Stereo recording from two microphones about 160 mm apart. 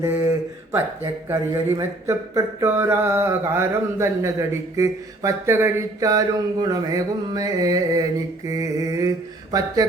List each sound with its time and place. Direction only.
0.0 s speech: 15° right (ahead or behind)